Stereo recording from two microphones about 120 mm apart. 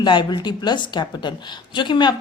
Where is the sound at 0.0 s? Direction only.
40° left (ahead or behind).